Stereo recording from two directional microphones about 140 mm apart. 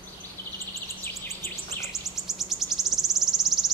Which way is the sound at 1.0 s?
20° left (ahead or behind).